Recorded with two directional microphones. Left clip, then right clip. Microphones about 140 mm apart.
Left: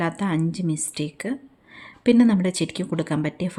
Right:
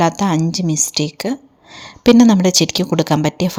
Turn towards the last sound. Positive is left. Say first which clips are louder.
# right 10 dB
turn(degrees=-45)  # may be behind; listen again after turning